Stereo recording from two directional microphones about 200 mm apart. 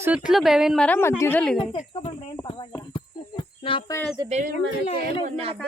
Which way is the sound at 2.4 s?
20° left (ahead or behind).